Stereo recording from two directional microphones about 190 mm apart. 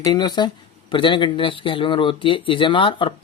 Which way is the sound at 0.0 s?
20° left (ahead or behind).